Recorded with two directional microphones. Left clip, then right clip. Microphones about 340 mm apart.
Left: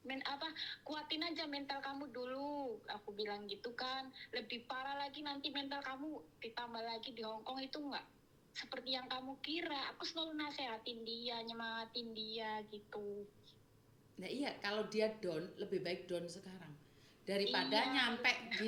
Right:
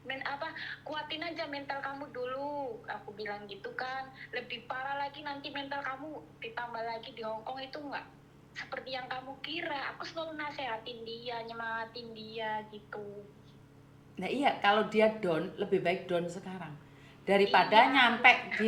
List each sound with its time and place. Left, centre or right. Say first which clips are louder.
0.1 s music: right 7 dB; left
0.9 s a woman's voice: right 5 dB; left
14.2 s speech: right 14 dB; centre